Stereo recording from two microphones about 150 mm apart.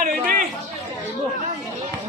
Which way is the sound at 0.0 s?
60° right (ahead or behind).